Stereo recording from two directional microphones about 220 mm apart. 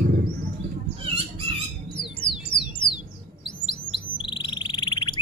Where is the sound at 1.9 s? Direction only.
20° left (ahead or behind).